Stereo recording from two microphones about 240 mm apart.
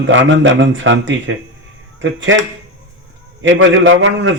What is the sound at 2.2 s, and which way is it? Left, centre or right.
A man's voice, right.